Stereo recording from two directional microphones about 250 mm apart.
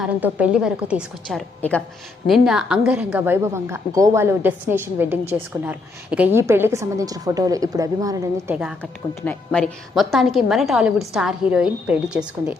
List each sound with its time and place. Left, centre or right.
0.0 s a woman's voice: centre